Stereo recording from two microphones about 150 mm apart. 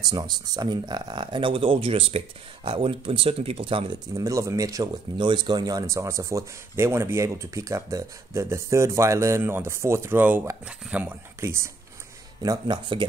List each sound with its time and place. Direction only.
0.0 s speech: 25° right (ahead or behind)
4.2 s speech: 20° right (ahead or behind)
12.4 s speech: 30° right (ahead or behind)